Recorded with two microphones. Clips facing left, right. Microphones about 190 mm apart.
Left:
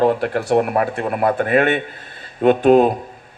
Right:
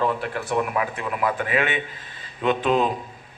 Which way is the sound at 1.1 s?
45° left (ahead or behind).